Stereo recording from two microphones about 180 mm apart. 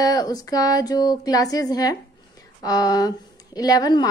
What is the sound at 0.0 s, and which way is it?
A woman's voice, 20° left (ahead or behind).